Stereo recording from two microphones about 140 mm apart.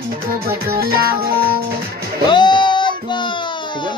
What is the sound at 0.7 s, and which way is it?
Music, 90° right.